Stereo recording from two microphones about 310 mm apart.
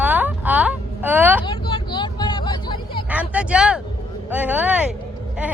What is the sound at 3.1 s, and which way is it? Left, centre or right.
Speech, centre.